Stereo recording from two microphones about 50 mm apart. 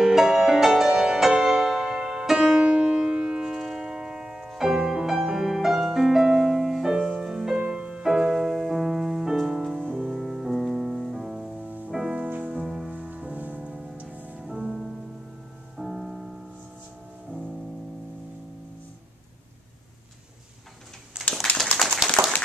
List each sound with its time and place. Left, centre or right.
0.0 s music: centre
12.9 s music: right
14.4 s music: centre
21.7 s a sound: centre